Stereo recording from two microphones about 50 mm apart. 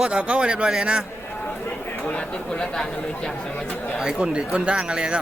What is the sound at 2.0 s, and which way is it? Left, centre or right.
Speech, left.